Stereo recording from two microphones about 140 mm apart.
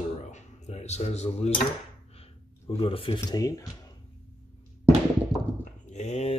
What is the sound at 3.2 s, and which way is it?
Speech, 25° left (ahead or behind).